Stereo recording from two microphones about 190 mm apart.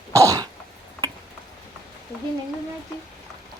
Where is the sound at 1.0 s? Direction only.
15° right (ahead or behind).